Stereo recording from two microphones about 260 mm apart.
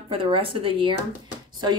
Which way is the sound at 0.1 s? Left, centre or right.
Right.